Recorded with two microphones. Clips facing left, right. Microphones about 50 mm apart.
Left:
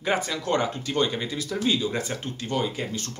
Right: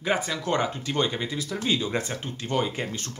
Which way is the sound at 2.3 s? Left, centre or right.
Right.